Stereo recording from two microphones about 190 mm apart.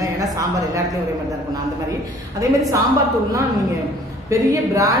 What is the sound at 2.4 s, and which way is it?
Speech, 15° right (ahead or behind).